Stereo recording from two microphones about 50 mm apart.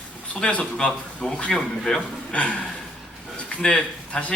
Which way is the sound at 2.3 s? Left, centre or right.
Left.